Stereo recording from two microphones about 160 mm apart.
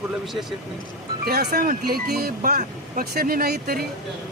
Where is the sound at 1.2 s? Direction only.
75° right (ahead or behind).